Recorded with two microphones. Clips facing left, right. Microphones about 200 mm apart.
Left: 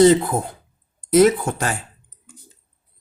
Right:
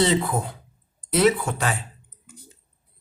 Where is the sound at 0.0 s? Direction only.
45° left (ahead or behind).